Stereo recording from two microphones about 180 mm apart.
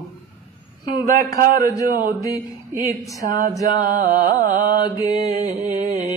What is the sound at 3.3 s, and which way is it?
Mantra, 60° right (ahead or behind).